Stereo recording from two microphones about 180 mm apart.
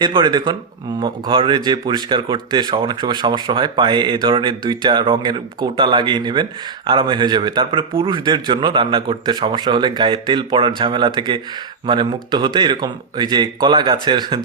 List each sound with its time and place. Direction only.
0.0 s speech: 25° right (ahead or behind)